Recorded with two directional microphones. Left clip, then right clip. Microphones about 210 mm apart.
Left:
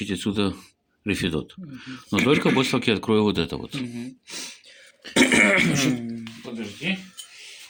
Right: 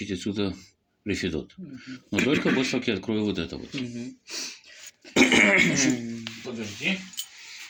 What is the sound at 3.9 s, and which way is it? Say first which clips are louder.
Speech: even; 15° left (ahead or behind).